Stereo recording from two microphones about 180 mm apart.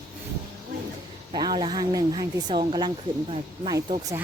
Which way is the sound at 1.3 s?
25° right (ahead or behind).